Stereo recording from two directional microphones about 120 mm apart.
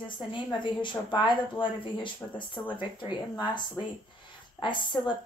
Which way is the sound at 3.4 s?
40° left (ahead or behind).